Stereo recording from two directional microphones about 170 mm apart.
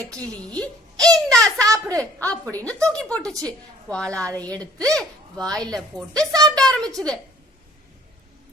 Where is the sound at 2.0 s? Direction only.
5° left (ahead or behind).